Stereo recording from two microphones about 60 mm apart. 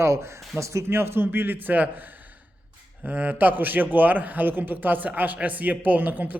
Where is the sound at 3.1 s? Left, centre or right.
Right.